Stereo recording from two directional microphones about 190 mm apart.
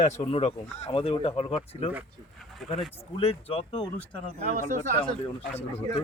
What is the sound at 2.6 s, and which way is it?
Speech, centre (ahead or behind).